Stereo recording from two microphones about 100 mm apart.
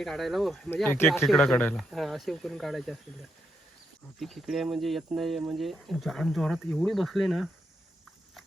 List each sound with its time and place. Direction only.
0.0 s speech: centre (ahead or behind)
0.9 s speech: 20° left (ahead or behind)
1.2 s speech: centre (ahead or behind)
4.2 s speech: centre (ahead or behind)